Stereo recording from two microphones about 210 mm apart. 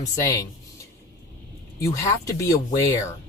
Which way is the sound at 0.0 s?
15° left (ahead or behind).